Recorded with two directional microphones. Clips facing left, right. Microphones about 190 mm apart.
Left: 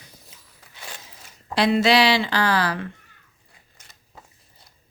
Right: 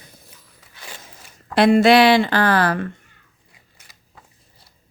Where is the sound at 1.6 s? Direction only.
50° right (ahead or behind).